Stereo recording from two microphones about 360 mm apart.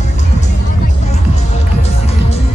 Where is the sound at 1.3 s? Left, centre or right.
Centre.